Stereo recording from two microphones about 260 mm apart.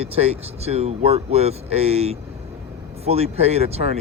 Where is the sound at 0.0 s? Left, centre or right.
Right.